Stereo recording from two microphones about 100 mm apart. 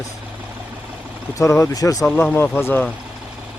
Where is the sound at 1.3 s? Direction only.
30° left (ahead or behind).